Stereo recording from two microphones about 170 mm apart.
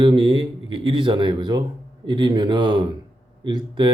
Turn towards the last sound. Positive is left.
turn(degrees=-30)  # may be behind; listen again after turning